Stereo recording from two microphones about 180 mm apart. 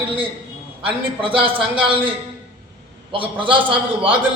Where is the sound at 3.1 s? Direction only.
30° right (ahead or behind).